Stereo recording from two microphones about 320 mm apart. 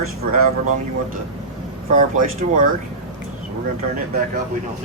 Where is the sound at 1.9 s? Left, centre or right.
Right.